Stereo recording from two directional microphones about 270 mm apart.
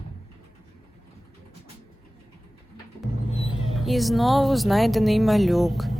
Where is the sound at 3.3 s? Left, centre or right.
Left.